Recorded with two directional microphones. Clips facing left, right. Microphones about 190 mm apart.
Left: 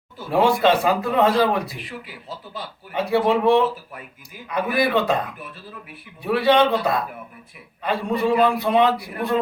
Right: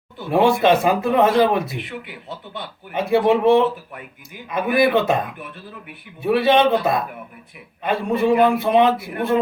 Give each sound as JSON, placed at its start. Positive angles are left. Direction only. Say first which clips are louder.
{"t": 0.2, "sound": "speech", "louder": "right 2 dB", "side_deg": -20}
{"t": 2.9, "sound": "speech", "louder": "right 3 dB", "side_deg": -20}
{"t": 6.2, "sound": "speech", "louder": "right 2 dB", "side_deg": -20}
{"t": 8.2, "sound": "speech", "louder": "right 3 dB", "side_deg": -20}